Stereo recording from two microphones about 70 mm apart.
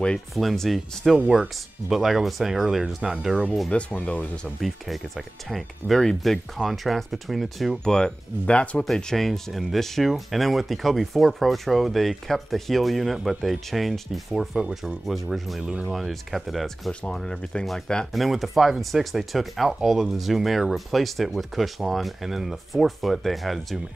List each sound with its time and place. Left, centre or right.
0.3 s speech: centre
1.1 s speech: centre
3.7 s speech: centre
4.6 s speech: centre
7.9 s speech: centre
8.8 s speech: centre
14.6 s speech: centre
15.0 s speech: centre
18.1 s speech: centre